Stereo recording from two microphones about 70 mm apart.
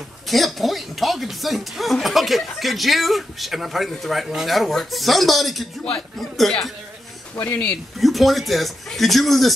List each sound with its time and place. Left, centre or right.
0.3 s speech: centre
7.4 s speech: centre
8.0 s speech: centre